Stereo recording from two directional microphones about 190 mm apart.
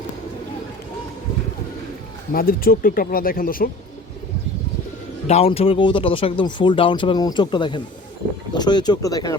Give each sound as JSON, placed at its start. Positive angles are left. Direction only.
{"t": 2.3, "sound": "speech", "side_deg": 50}
{"t": 5.3, "sound": "speech", "side_deg": 30}